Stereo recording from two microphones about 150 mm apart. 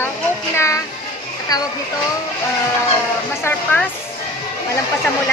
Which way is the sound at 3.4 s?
10° left (ahead or behind).